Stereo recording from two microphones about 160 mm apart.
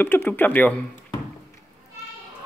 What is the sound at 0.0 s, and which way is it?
Speech, 10° left (ahead or behind).